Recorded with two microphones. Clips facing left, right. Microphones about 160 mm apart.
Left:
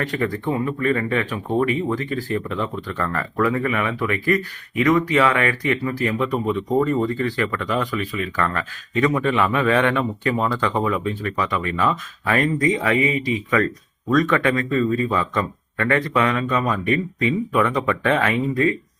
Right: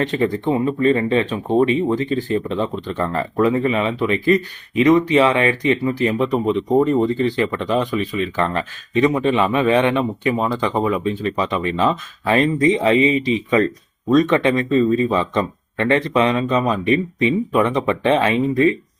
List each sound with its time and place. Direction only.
0.0 s speech: 25° right (ahead or behind)